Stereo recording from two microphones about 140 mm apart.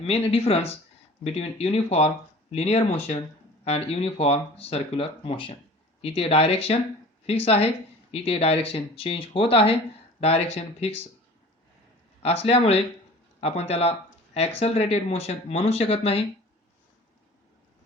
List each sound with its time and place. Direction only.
0.0 s speech: 45° left (ahead or behind)
12.2 s speech: 45° left (ahead or behind)